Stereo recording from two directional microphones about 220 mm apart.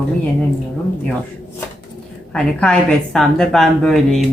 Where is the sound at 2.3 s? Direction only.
5° left (ahead or behind).